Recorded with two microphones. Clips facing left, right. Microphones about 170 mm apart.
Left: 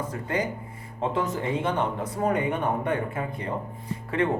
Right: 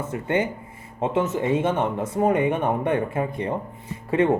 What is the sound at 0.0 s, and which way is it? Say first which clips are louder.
Speech: right 4 dB; 25° right (ahead or behind).